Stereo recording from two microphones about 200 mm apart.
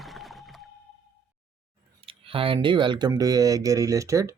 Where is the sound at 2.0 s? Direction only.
25° right (ahead or behind).